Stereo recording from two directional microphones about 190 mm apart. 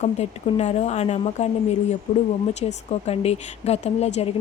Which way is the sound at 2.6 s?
35° left (ahead or behind).